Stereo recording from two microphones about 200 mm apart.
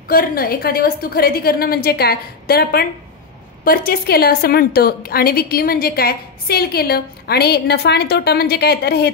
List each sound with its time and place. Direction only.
0.1 s a woman's voice: 45° left (ahead or behind)